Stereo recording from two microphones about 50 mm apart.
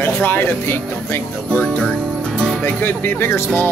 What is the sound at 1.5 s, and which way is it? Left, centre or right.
Speech, left.